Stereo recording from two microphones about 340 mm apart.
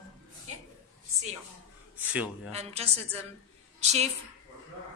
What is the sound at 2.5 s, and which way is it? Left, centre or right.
A woman's voice, centre.